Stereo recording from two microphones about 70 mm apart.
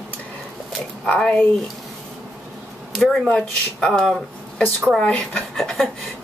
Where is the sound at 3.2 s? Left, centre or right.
Centre.